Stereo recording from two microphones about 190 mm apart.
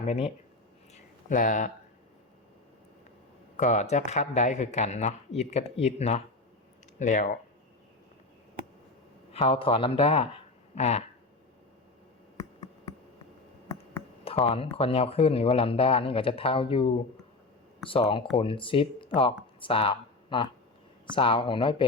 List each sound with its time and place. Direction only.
0.0 s speech: 35° left (ahead or behind)
0.9 s a sound: 45° left (ahead or behind)
3.6 s speech: 35° left (ahead or behind)
9.3 s speech: 30° left (ahead or behind)
14.3 s speech: 30° left (ahead or behind)